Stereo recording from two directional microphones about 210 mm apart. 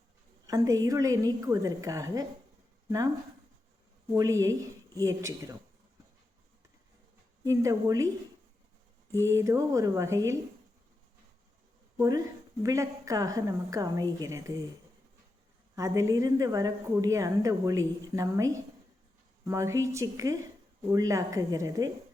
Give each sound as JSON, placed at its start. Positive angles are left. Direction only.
{"t": 0.4, "sound": "a woman's voice", "side_deg": -15}
{"t": 4.1, "sound": "a woman's voice", "side_deg": -15}
{"t": 7.4, "sound": "a woman's voice", "side_deg": -15}
{"t": 9.2, "sound": "a woman's voice", "side_deg": -15}
{"t": 11.9, "sound": "a woman's voice", "side_deg": -15}
{"t": 15.7, "sound": "a woman's voice", "side_deg": -15}